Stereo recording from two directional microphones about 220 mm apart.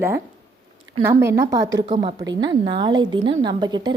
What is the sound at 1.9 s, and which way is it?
A woman's voice, 25° right (ahead or behind).